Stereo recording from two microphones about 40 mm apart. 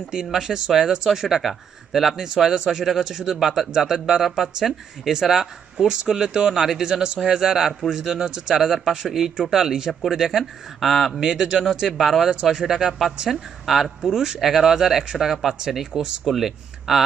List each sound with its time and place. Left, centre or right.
0.3 s speech: centre
2.1 s speech: centre
11.7 s speech: centre
11.9 s speech: centre
12.3 s speech: centre
14.0 s speech: centre
16.2 s speech: centre